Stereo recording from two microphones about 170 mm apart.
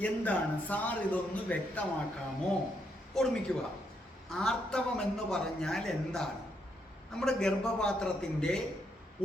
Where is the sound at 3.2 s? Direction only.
Centre (ahead or behind).